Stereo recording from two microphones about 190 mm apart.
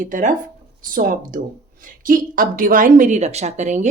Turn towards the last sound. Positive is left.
turn(degrees=-40)  # may be behind; listen again after turning